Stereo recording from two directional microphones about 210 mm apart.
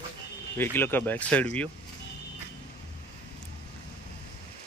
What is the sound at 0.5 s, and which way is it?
Speech, 10° left (ahead or behind).